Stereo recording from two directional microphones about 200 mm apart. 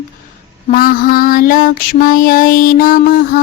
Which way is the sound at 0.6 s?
45° left (ahead or behind).